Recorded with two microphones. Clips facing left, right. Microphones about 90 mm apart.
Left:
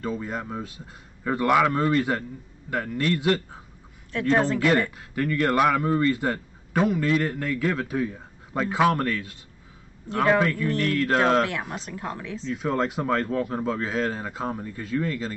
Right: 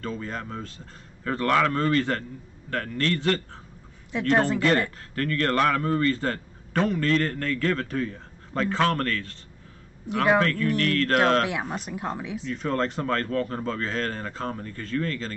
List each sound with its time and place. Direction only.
0.0 s a man's voice: 10° left (ahead or behind)
10.4 s a man's voice: 10° left (ahead or behind)
11.7 s a woman's voice: 15° right (ahead or behind)
12.5 s a man's voice: 5° left (ahead or behind)